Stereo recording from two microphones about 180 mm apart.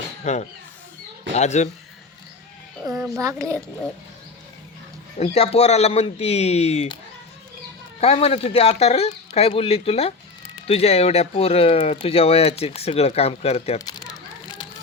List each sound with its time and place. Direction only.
0.3 s speech: 40° left (ahead or behind)
2.8 s a child's voice: centre (ahead or behind)
3.1 s a child's voice: 20° right (ahead or behind)
5.1 s speech: 35° left (ahead or behind)
8.0 s speech: 35° left (ahead or behind)